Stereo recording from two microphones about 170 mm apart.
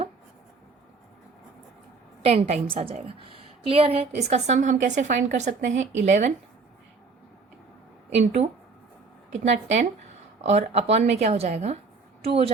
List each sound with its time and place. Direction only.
2.2 s a woman's voice: 40° right (ahead or behind)
9.3 s a woman's voice: 45° right (ahead or behind)